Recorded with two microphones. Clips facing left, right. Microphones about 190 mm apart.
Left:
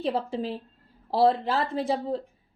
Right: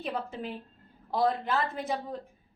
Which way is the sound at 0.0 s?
30° left (ahead or behind).